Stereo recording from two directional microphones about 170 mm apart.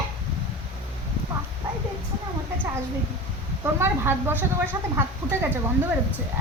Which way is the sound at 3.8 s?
15° right (ahead or behind).